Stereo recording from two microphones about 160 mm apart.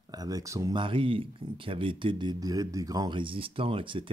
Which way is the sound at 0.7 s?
30° right (ahead or behind).